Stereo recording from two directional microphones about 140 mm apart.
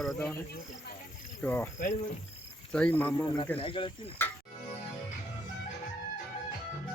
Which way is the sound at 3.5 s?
40° left (ahead or behind).